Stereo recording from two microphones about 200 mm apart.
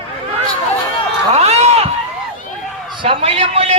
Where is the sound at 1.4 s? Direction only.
30° right (ahead or behind).